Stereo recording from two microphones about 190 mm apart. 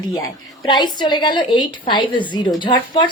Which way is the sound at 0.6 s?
25° left (ahead or behind).